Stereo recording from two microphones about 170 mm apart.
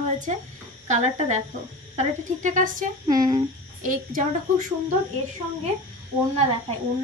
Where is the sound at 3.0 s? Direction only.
20° right (ahead or behind).